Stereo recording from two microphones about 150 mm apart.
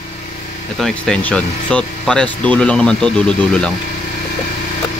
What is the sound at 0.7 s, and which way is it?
Speech, 5° left (ahead or behind).